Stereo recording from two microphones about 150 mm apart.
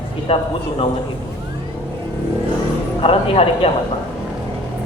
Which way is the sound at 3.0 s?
40° left (ahead or behind).